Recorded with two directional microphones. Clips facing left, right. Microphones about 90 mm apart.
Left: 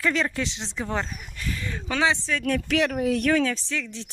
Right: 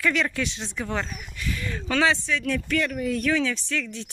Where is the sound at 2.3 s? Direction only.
50° left (ahead or behind).